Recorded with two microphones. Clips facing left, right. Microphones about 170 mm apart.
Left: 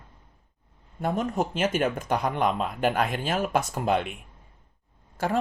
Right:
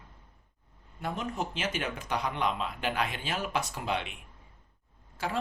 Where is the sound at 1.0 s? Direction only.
45° left (ahead or behind).